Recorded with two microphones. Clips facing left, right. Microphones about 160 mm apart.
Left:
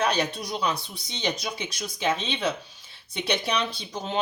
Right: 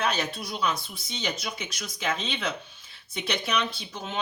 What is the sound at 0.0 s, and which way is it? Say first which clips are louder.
Speech: left 3 dB; 35° left (ahead or behind).